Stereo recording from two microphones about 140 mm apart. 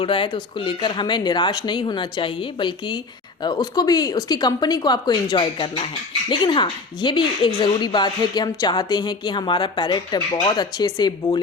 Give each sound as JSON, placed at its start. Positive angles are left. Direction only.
{"t": 0.0, "sound": "a woman's voice", "side_deg": 40}